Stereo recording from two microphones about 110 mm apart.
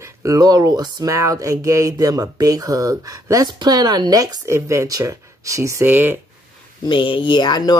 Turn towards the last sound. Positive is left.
turn(degrees=40)  # may be behind; listen again after turning